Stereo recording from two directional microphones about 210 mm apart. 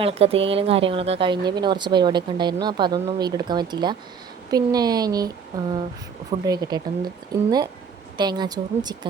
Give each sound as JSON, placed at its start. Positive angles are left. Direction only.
{"t": 0.0, "sound": "speech", "side_deg": -30}
{"t": 8.2, "sound": "speech", "side_deg": -20}